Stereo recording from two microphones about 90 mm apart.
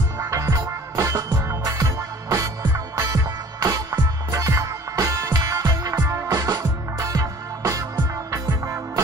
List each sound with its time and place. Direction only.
0.2 s music: 35° right (ahead or behind)